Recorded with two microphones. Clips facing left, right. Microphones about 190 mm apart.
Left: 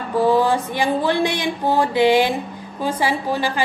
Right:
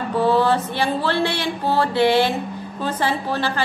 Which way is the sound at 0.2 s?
10° left (ahead or behind).